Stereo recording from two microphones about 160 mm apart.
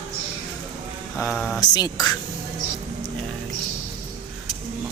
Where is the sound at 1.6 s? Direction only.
25° left (ahead or behind).